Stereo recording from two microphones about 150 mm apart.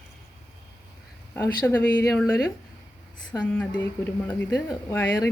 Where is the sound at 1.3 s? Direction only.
15° left (ahead or behind).